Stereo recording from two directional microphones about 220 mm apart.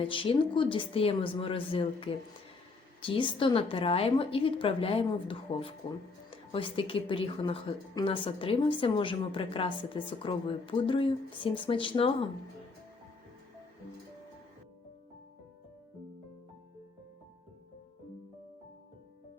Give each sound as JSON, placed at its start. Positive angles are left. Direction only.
{"t": 0.0, "sound": "a woman's voice", "side_deg": 25}